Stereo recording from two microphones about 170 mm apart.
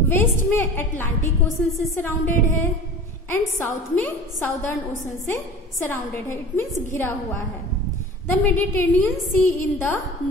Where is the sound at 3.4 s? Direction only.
10° left (ahead or behind).